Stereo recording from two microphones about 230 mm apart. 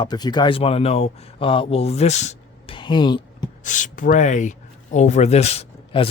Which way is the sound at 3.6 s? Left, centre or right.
Left.